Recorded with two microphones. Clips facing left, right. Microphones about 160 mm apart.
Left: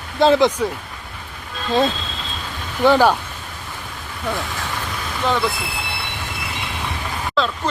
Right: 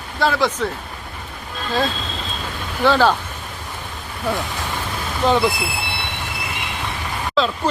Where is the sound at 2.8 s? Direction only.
15° left (ahead or behind).